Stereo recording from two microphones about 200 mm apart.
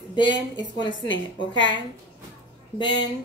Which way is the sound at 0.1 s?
25° left (ahead or behind).